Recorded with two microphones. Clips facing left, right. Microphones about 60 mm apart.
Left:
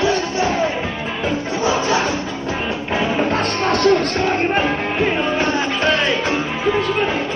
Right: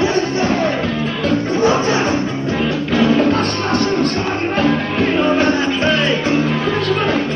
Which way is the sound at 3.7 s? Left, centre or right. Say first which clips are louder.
Left 5 dB; right.